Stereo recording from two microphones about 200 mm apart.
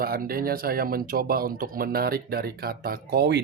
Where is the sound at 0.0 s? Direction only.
50° right (ahead or behind).